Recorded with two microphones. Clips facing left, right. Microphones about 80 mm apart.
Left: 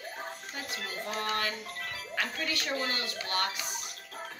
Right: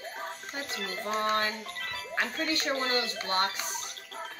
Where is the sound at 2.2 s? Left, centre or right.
Right.